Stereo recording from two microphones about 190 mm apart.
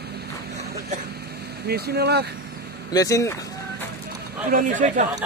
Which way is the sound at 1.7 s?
60° right (ahead or behind).